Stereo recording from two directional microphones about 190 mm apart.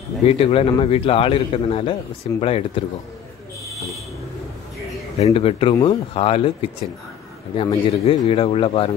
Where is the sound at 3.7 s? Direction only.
Centre (ahead or behind).